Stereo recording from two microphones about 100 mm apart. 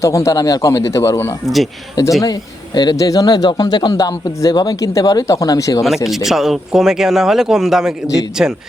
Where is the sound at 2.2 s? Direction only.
45° left (ahead or behind).